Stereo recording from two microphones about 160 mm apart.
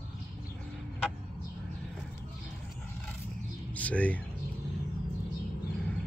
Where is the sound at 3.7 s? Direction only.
10° left (ahead or behind).